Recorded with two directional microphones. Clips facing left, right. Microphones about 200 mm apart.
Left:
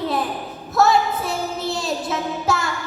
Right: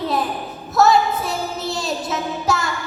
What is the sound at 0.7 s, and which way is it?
Child singing, 55° left (ahead or behind).